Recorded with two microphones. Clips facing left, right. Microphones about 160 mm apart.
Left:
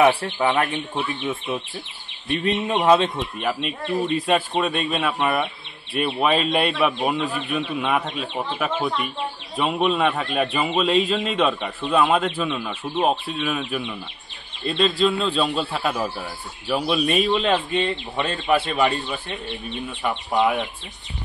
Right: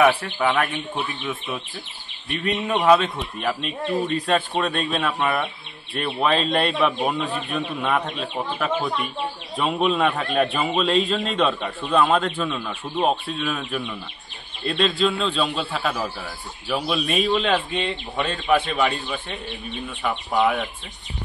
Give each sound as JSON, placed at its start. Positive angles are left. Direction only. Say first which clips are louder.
{"t": 0.0, "sound": "speech", "louder": "left 1 dB", "side_deg": 25}
{"t": 2.4, "sound": "speech", "louder": "even", "side_deg": 25}
{"t": 3.3, "sound": "a man's voice", "louder": "right 2 dB", "side_deg": 0}